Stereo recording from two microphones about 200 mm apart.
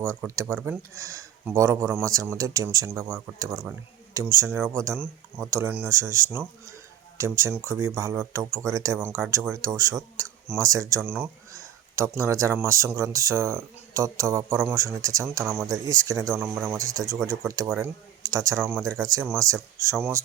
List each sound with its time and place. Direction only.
0.0 s speech: 15° right (ahead or behind)
16.4 s speech: 5° right (ahead or behind)
16.7 s speech: 15° right (ahead or behind)
18.2 s speech: 15° right (ahead or behind)